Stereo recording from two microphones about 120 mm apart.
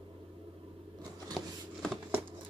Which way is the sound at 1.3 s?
5° left (ahead or behind).